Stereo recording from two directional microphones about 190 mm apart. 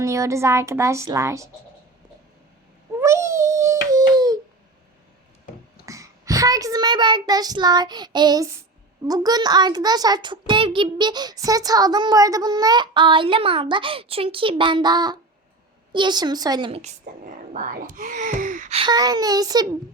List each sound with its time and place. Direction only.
0.0 s a woman's voice: 15° right (ahead or behind)
3.0 s a sound: 15° right (ahead or behind)
5.8 s child singing: 15° right (ahead or behind)
9.0 s a child's voice: 20° right (ahead or behind)
17.2 s whispering: 45° right (ahead or behind)
18.8 s a child's voice: 20° right (ahead or behind)